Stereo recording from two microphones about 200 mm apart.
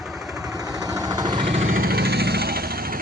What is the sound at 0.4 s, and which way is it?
Vehicle, 20° right (ahead or behind).